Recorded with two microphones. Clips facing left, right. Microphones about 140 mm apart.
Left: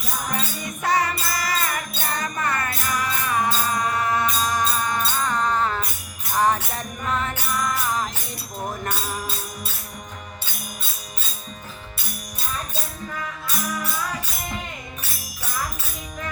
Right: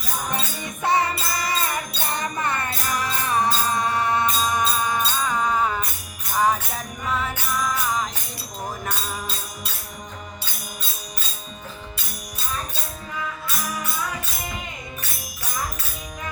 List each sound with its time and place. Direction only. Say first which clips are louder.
0.8 s music: right 1 dB; 25° right (ahead or behind); by 8.1 s centre (ahead or behind)